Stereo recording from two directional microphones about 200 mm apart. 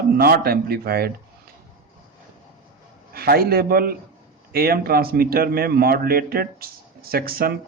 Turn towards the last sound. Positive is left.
turn(degrees=-50)  # may be behind; listen again after turning